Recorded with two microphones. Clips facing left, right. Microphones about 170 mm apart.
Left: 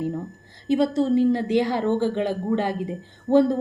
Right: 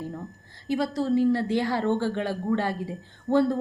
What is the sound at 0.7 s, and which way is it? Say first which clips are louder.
A woman's voice: left 5 dB; 25° left (ahead or behind).